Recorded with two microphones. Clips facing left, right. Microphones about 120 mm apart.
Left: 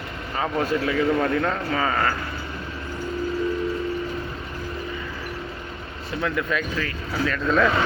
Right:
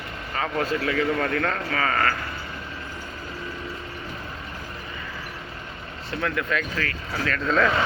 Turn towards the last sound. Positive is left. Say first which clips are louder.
# left 2 dB
turn(degrees=10)  # may be behind; listen again after turning